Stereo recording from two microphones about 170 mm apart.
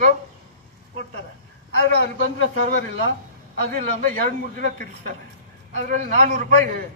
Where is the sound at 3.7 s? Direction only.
55° right (ahead or behind).